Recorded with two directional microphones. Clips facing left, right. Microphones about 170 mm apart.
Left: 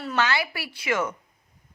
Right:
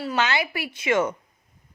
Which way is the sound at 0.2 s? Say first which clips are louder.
Even; 20° right (ahead or behind).